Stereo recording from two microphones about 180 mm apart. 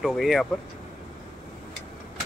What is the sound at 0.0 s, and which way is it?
Speech, centre (ahead or behind).